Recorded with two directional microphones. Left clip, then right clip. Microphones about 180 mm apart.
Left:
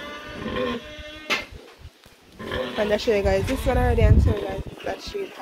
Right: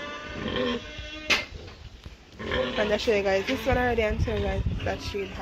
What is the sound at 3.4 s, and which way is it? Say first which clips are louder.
Speech: left 1 dB; centre (ahead or behind).